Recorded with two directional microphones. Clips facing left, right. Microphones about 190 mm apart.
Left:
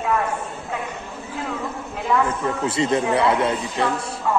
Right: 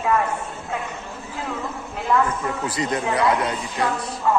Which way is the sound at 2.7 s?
25° left (ahead or behind).